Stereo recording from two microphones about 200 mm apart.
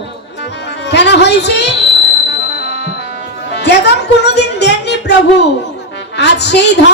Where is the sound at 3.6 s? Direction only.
60° left (ahead or behind).